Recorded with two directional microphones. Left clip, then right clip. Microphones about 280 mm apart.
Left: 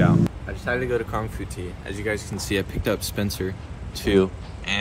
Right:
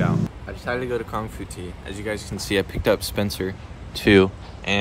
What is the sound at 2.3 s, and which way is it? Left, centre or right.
Speech, right.